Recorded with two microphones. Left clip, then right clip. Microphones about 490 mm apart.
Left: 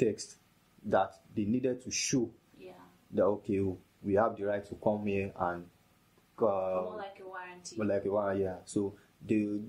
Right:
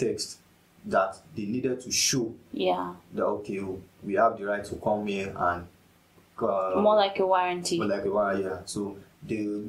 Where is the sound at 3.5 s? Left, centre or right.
Left.